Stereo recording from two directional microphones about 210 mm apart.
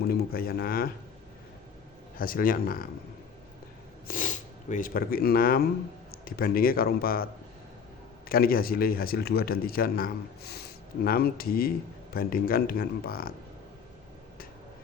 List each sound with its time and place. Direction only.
0.1 s speech: 45° left (ahead or behind)
2.1 s speech: 45° left (ahead or behind)
4.1 s speech: 40° left (ahead or behind)
8.3 s speech: 45° left (ahead or behind)